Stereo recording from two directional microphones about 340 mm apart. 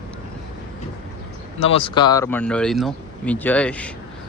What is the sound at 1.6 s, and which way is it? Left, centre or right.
Speech, centre.